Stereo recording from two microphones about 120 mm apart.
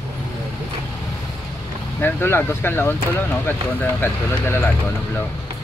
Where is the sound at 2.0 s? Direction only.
15° left (ahead or behind).